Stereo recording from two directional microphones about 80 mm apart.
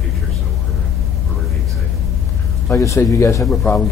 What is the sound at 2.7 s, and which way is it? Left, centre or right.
Speech, left.